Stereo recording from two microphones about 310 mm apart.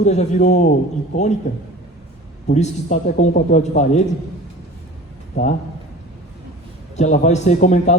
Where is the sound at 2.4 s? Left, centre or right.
Left.